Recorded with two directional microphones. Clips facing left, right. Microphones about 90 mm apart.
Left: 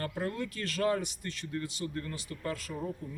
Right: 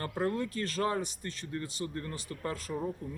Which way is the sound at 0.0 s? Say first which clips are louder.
Right 2 dB; 30° right (ahead or behind).